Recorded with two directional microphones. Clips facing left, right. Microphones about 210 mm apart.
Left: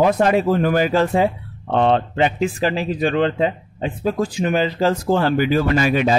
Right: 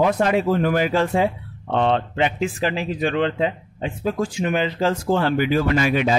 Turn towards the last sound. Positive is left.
turn(degrees=40)  # may be behind; listen again after turning